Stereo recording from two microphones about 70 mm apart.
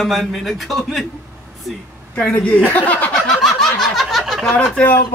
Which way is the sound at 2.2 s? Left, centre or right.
Centre.